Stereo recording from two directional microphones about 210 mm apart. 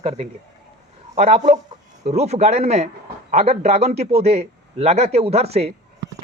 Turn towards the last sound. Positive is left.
turn(degrees=-30)  # may be behind; listen again after turning